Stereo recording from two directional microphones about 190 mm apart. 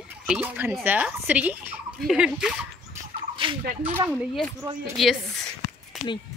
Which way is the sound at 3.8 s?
10° right (ahead or behind).